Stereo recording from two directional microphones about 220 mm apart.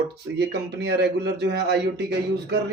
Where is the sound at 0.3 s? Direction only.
50° right (ahead or behind).